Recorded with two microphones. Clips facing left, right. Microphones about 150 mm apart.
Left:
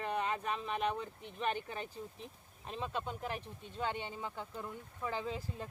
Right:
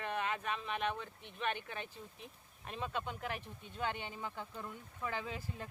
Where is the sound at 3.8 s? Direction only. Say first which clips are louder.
Left 1 dB; centre (ahead or behind).